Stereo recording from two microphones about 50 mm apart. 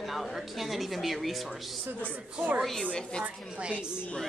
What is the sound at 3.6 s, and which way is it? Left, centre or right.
Speech, centre.